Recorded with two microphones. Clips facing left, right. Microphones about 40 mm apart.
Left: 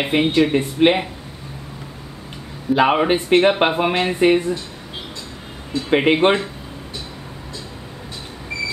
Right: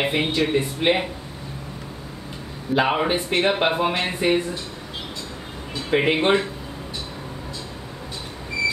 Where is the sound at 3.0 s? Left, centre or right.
Left.